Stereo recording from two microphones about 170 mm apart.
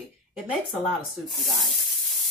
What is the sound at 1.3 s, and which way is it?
Sanding, centre (ahead or behind).